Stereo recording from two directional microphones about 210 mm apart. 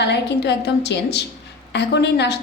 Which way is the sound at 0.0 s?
55° left (ahead or behind).